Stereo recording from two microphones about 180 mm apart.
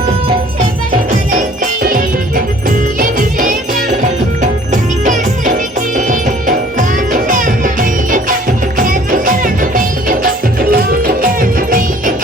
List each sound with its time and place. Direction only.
1.4 s music: 50° right (ahead or behind)
4.7 s music: 45° right (ahead or behind)